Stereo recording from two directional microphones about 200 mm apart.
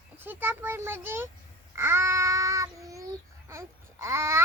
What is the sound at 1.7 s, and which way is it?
Child singing, 10° right (ahead or behind).